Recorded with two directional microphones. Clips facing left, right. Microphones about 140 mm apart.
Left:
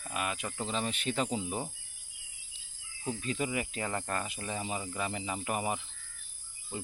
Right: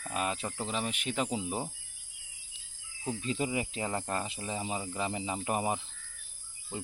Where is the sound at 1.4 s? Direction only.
20° right (ahead or behind).